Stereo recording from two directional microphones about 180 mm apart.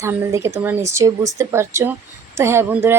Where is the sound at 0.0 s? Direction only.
15° right (ahead or behind).